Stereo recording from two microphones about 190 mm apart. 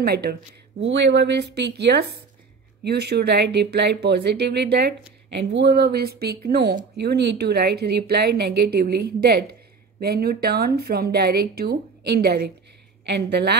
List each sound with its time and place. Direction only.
0.0 s a woman's voice: 55° right (ahead or behind)